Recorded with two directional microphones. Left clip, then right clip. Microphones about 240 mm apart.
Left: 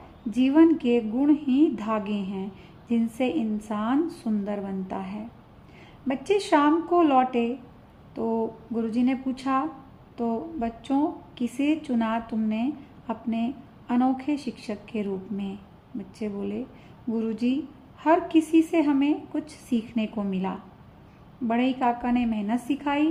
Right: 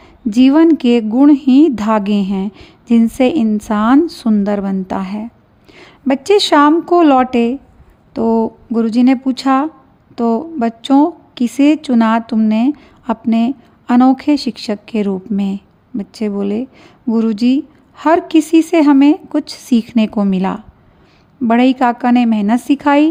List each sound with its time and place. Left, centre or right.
0.3 s speech: right